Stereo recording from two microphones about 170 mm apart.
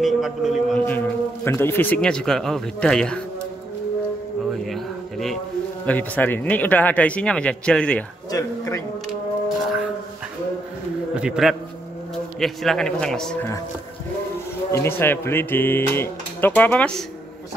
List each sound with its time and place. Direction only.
0.0 s a man's voice: centre (ahead or behind)
0.8 s a man's voice: 10° left (ahead or behind)
4.6 s a sound: centre (ahead or behind)
5.9 s speech: 10° left (ahead or behind)
8.3 s a sound: 20° left (ahead or behind)
9.6 s music: centre (ahead or behind)
11.1 s a man's voice: 5° right (ahead or behind)
14.7 s speech: 15° left (ahead or behind)